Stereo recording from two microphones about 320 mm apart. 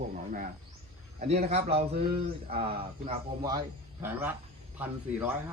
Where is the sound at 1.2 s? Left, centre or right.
Centre.